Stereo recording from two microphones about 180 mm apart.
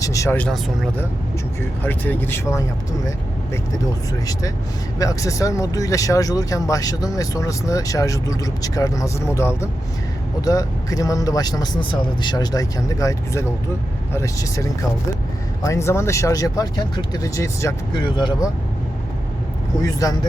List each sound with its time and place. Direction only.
0.0 s speech: 15° left (ahead or behind)
4.9 s speech: 20° left (ahead or behind)
19.8 s speech: 20° left (ahead or behind)